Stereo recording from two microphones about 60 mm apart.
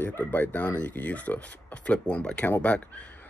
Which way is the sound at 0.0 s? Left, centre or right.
Left.